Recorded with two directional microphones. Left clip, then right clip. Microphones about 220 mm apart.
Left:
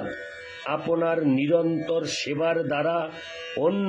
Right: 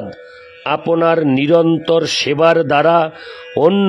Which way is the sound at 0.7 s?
45° right (ahead or behind).